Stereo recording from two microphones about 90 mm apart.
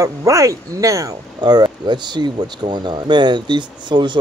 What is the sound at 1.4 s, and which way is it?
Speech, 50° right (ahead or behind).